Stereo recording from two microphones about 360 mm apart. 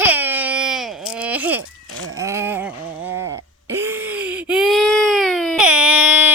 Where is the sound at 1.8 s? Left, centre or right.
Right.